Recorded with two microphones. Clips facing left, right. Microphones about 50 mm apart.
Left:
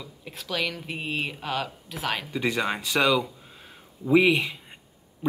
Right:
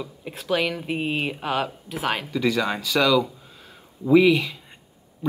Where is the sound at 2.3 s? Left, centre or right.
Centre.